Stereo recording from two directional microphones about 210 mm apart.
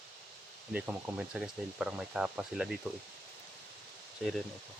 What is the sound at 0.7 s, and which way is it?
Speech, 10° right (ahead or behind).